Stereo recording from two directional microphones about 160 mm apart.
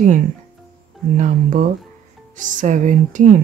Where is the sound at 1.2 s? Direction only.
55° right (ahead or behind).